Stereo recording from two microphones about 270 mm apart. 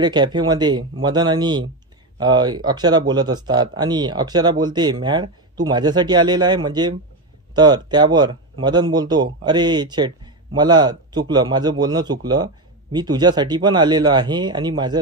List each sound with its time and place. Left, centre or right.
0.0 s speech: centre